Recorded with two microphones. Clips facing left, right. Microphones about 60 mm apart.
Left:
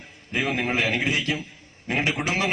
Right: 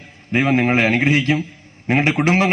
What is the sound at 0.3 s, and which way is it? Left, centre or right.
A man's voice, right.